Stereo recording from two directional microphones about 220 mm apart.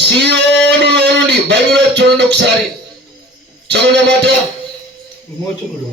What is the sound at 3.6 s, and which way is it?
Speech, 50° right (ahead or behind).